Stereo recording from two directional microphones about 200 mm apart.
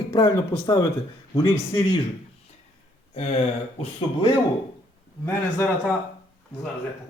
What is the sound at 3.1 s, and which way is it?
Speech, 35° left (ahead or behind).